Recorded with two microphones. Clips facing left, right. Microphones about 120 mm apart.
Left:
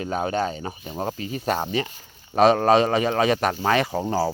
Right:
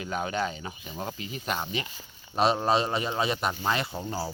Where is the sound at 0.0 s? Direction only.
40° left (ahead or behind).